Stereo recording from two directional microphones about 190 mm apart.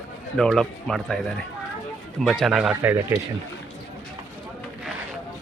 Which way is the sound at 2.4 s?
5° right (ahead or behind).